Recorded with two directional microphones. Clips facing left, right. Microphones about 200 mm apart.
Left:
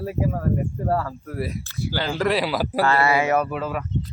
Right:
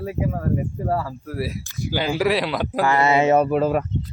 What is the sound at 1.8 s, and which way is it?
Speech, 15° right (ahead or behind).